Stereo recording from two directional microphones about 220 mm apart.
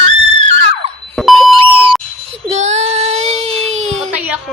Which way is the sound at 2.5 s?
30° right (ahead or behind).